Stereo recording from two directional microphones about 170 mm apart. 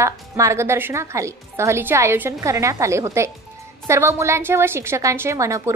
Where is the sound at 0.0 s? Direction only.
15° right (ahead or behind).